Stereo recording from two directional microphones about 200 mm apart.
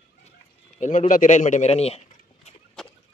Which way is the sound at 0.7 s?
40° left (ahead or behind).